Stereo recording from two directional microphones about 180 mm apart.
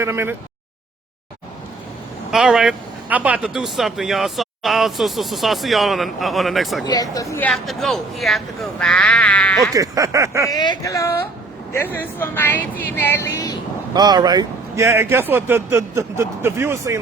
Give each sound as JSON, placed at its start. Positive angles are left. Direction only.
{"t": 0.0, "sound": "a man's voice", "side_deg": -15}
{"t": 2.3, "sound": "speech", "side_deg": -5}
{"t": 6.8, "sound": "speech", "side_deg": 20}
{"t": 7.4, "sound": "speech", "side_deg": 0}
{"t": 9.7, "sound": "a man's voice", "side_deg": -20}
{"t": 10.5, "sound": "speech", "side_deg": 20}
{"t": 13.9, "sound": "a man's voice", "side_deg": -25}